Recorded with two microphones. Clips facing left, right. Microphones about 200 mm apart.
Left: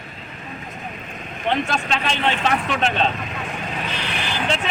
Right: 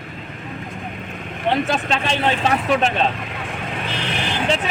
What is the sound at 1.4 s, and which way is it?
Speech, 35° right (ahead or behind).